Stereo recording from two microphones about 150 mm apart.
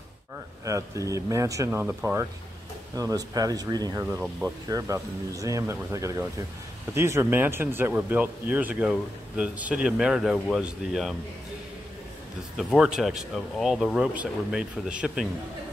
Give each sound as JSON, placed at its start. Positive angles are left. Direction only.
{"t": 0.7, "sound": "speech", "side_deg": -20}
{"t": 3.0, "sound": "speech", "side_deg": -25}
{"t": 4.0, "sound": "speech", "side_deg": -10}
{"t": 4.6, "sound": "speech", "side_deg": -20}
{"t": 12.7, "sound": "speech", "side_deg": -5}